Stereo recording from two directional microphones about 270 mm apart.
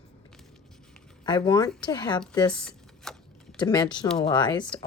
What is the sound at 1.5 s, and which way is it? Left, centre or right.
Speech, centre.